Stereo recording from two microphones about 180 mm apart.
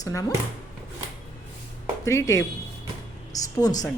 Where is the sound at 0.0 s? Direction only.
20° left (ahead or behind).